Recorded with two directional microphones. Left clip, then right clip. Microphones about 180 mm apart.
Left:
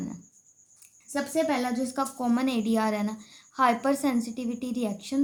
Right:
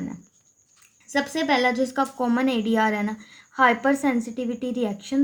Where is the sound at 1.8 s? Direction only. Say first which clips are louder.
Right 6 dB; 45° right (ahead or behind).